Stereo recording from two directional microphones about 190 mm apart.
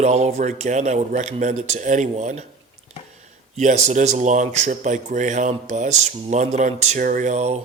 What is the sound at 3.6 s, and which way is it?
Speech, 40° right (ahead or behind).